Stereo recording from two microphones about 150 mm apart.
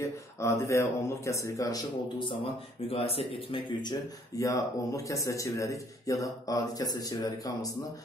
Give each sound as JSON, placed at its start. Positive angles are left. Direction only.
{"t": 0.0, "sound": "speech", "side_deg": 20}
{"t": 2.1, "sound": "speech", "side_deg": 40}
{"t": 4.4, "sound": "speech", "side_deg": 20}